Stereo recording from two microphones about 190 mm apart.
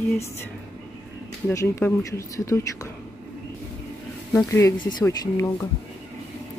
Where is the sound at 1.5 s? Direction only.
15° left (ahead or behind).